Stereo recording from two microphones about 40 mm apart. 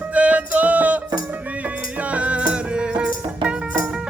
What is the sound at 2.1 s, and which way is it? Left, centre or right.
Music, right.